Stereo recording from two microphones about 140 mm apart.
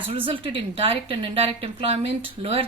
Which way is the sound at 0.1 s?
40° right (ahead or behind).